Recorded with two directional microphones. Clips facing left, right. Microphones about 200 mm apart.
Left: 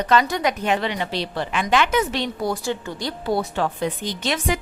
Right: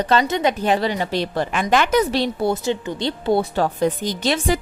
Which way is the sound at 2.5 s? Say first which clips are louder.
Right 4 dB; 20° right (ahead or behind).